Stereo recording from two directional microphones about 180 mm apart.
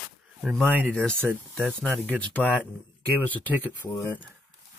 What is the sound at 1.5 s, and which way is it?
Speech, centre (ahead or behind).